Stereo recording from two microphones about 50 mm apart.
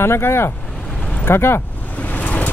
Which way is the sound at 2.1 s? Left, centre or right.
Left.